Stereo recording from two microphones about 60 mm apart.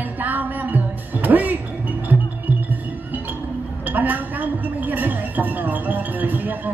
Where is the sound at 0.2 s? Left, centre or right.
Right.